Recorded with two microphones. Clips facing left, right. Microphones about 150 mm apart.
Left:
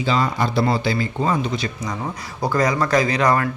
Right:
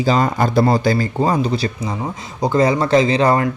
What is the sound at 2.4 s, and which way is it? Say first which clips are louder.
Speech: right 4 dB; 25° right (ahead or behind).